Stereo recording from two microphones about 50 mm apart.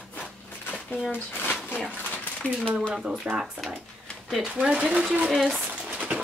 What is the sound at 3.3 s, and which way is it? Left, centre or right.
Speech, right.